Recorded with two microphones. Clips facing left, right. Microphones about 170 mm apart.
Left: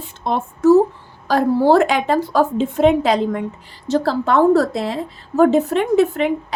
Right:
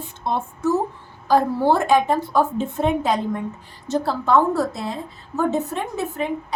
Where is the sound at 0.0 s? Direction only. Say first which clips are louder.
Left 3 dB; 90° left.